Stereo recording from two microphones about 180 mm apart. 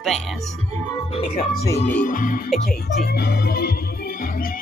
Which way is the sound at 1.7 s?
45° left (ahead or behind).